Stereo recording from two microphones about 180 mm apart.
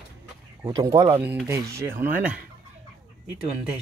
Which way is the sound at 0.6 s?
15° right (ahead or behind).